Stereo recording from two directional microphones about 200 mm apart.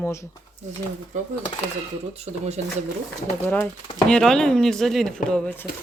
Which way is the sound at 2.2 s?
35° right (ahead or behind).